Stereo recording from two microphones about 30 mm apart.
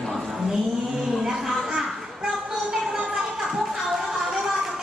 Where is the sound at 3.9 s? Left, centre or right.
Centre.